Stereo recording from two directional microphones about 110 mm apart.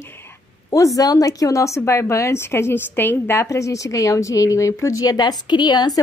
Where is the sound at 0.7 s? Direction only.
30° left (ahead or behind).